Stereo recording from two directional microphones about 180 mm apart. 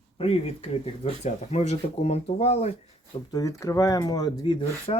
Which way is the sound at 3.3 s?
20° left (ahead or behind).